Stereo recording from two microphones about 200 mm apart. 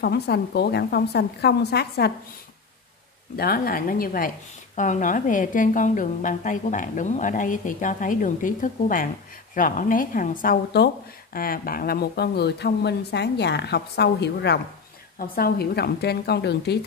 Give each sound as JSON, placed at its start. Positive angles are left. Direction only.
{"t": 0.0, "sound": "a woman's voice", "side_deg": 55}
{"t": 3.3, "sound": "a woman's voice", "side_deg": 50}